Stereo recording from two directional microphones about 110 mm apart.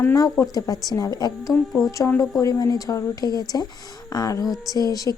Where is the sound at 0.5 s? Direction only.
35° left (ahead or behind).